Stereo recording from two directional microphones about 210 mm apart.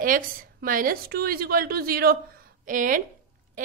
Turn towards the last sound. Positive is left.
turn(degrees=-40)  # may be behind; listen again after turning